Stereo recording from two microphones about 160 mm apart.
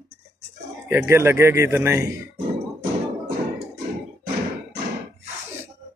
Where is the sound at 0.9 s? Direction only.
15° right (ahead or behind).